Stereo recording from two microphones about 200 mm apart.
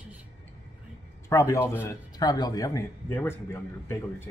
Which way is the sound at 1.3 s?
15° left (ahead or behind).